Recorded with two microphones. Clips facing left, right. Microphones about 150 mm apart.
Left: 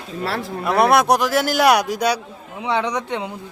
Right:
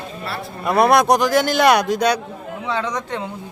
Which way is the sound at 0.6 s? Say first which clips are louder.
Right 1 dB; centre (ahead or behind).